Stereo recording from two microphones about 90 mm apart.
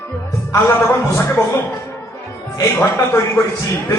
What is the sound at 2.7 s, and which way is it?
Speech, 30° left (ahead or behind).